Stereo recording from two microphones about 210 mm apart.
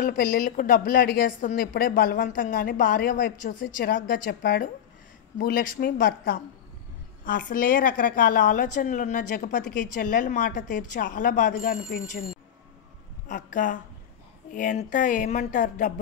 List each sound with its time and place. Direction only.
0.1 s a woman's voice: 40° left (ahead or behind)
13.3 s a woman's voice: 40° left (ahead or behind)